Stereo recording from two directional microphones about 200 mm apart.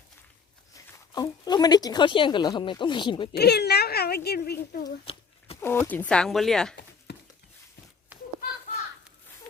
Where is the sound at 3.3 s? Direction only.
55° left (ahead or behind).